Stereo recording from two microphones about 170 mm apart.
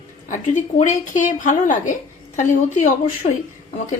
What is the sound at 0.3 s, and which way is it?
A woman's voice, 45° left (ahead or behind).